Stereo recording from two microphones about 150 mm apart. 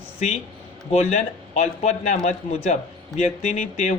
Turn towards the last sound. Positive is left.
turn(degrees=50)  # may be behind; listen again after turning